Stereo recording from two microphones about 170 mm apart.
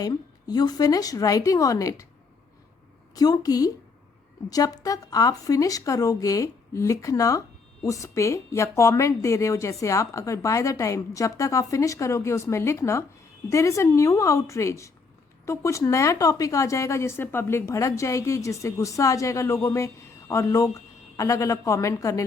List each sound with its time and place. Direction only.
0.0 s a woman's voice: 25° left (ahead or behind)
3.2 s a woman's voice: 20° left (ahead or behind)